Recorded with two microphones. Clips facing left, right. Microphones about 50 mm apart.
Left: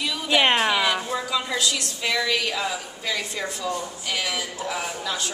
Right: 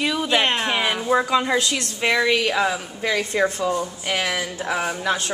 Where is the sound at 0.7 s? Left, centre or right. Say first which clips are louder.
Right 2 dB; right.